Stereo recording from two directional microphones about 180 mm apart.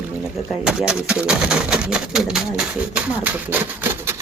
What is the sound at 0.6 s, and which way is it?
Speech, 5° right (ahead or behind).